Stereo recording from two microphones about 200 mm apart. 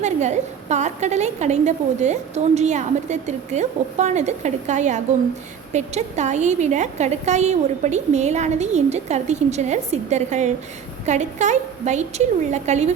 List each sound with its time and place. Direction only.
0.0 s a woman's voice: 35° right (ahead or behind)